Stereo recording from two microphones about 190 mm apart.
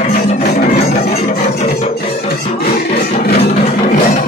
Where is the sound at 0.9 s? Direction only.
35° left (ahead or behind).